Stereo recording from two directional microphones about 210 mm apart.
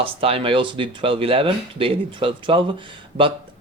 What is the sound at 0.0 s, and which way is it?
Speech, 25° right (ahead or behind).